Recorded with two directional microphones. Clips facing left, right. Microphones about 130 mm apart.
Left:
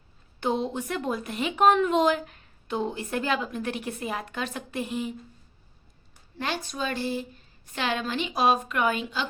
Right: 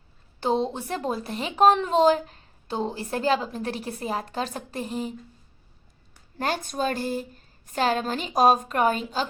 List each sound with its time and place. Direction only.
0.3 s speech: 30° right (ahead or behind)
6.4 s speech: 45° right (ahead or behind)